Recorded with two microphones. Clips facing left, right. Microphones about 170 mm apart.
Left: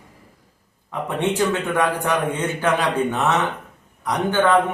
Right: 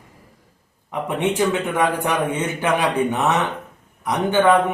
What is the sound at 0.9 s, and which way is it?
A man's voice, 15° right (ahead or behind).